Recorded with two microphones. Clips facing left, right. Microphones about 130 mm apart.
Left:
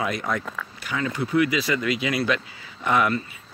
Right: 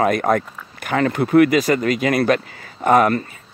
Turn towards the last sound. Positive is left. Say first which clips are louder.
# right 7 dB
turn(degrees=-50)  # may be behind; listen again after turning